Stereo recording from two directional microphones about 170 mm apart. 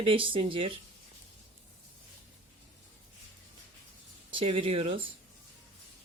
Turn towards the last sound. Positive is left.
turn(degrees=-35)  # may be behind; listen again after turning